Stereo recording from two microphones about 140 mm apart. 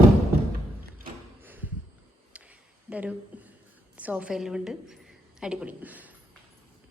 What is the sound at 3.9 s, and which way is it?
A woman's voice, 10° right (ahead or behind).